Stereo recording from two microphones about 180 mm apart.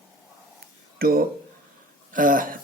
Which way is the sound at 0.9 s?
55° right (ahead or behind).